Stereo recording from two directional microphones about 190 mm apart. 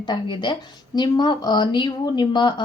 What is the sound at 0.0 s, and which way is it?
Speech, 25° left (ahead or behind).